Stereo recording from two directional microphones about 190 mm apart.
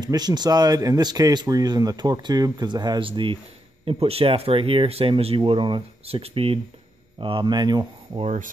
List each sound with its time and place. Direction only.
0.0 s speech: 20° right (ahead or behind)
8.2 s speech: 35° right (ahead or behind)